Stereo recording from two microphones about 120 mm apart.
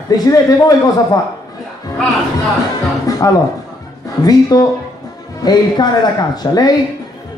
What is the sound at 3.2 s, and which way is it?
Speech, 30° left (ahead or behind).